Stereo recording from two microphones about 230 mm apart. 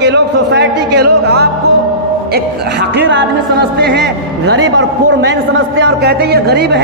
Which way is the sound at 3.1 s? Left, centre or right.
Right.